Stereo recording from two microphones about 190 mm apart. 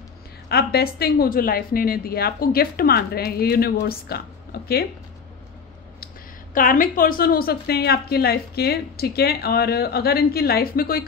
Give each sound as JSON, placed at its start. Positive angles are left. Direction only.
{"t": 0.5, "sound": "a woman's voice", "side_deg": 55}
{"t": 6.5, "sound": "a woman's voice", "side_deg": 45}